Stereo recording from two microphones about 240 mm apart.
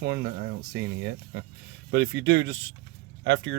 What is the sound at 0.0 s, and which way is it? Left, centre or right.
Speech, right.